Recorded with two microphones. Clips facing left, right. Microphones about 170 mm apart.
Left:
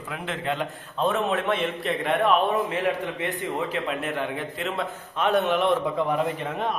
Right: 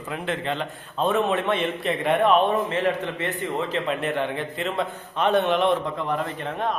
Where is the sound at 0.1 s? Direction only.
Centre (ahead or behind).